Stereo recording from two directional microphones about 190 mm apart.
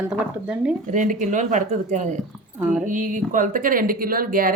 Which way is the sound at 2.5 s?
10° right (ahead or behind).